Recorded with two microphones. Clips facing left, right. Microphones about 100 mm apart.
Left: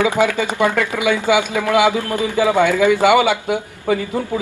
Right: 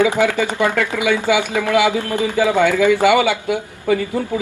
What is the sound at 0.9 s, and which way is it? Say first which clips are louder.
Speech: left 1 dB; 20° left (ahead or behind).